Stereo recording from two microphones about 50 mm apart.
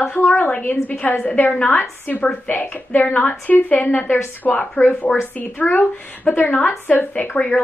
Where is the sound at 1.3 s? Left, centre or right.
Left.